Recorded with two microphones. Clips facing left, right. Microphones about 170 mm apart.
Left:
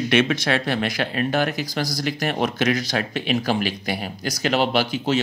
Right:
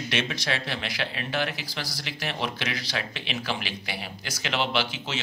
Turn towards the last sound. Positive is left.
turn(degrees=40)  # may be behind; listen again after turning